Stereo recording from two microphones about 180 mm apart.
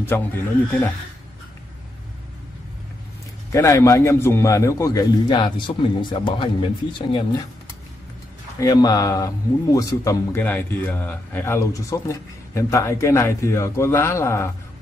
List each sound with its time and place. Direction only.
0.1 s speech: 10° left (ahead or behind)
3.5 s a man's voice: 20° left (ahead or behind)
8.5 s speech: 20° left (ahead or behind)